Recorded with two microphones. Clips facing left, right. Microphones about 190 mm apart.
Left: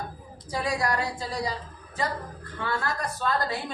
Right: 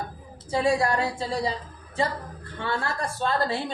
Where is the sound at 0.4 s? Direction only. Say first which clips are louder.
Right 5 dB; 25° right (ahead or behind).